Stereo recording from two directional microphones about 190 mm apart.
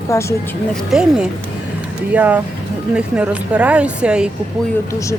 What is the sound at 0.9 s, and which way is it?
Speech, 5° right (ahead or behind).